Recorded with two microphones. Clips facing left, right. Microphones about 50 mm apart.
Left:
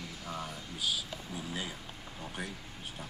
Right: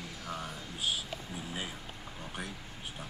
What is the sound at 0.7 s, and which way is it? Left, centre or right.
Speech, right.